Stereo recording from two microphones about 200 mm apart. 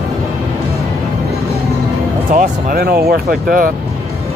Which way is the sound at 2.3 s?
50° right (ahead or behind).